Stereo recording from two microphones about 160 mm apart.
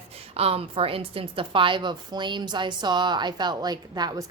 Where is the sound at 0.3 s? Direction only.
40° right (ahead or behind).